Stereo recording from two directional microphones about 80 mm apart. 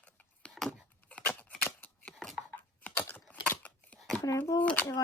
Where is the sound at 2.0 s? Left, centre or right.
Centre.